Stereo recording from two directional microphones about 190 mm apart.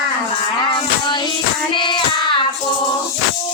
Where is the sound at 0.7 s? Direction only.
25° left (ahead or behind).